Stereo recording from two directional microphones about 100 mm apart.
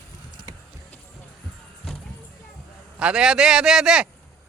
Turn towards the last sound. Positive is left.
turn(degrees=-5)  # may be behind; listen again after turning